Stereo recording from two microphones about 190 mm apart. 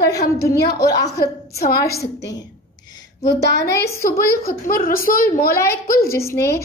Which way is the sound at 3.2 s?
65° left (ahead or behind).